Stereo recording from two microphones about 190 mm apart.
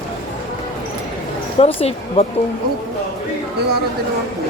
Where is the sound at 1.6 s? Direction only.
30° left (ahead or behind).